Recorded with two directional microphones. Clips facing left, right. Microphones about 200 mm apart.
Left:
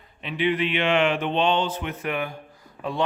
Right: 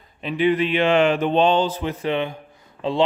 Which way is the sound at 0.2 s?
40° right (ahead or behind).